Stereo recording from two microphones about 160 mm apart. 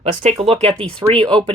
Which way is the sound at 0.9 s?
5° left (ahead or behind).